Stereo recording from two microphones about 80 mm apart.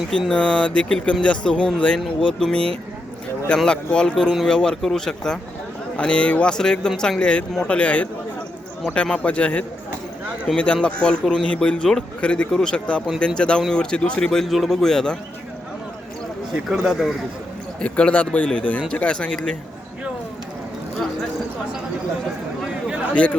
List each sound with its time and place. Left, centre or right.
0.1 s a man's voice: centre
16.6 s speech: centre
17.7 s a man's voice: centre